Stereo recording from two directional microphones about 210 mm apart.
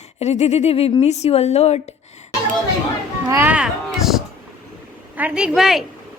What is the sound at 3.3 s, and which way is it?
Music, 10° right (ahead or behind).